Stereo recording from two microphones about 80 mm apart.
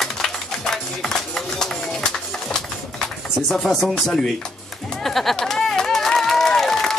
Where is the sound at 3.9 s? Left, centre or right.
Centre.